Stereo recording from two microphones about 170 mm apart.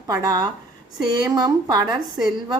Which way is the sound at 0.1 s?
20° right (ahead or behind).